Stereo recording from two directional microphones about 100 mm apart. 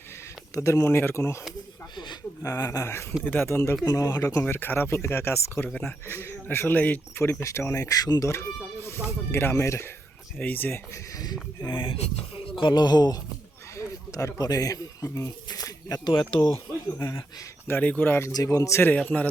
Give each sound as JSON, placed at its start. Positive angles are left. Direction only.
{"t": 0.5, "sound": "speech", "side_deg": 30}
{"t": 2.4, "sound": "speech", "side_deg": 35}
{"t": 7.2, "sound": "speech", "side_deg": 25}
{"t": 8.3, "sound": "a sound", "side_deg": 30}
{"t": 9.0, "sound": "speech", "side_deg": 25}
{"t": 10.3, "sound": "speech", "side_deg": 15}
{"t": 11.6, "sound": "speech", "side_deg": 50}
{"t": 11.9, "sound": "speech", "side_deg": 90}
{"t": 13.7, "sound": "speech", "side_deg": 30}
{"t": 16.1, "sound": "speech", "side_deg": 50}
{"t": 17.0, "sound": "speech", "side_deg": 30}
{"t": 17.7, "sound": "speech", "side_deg": 15}
{"t": 18.4, "sound": "speech", "side_deg": 30}
{"t": 19.0, "sound": "speech", "side_deg": 15}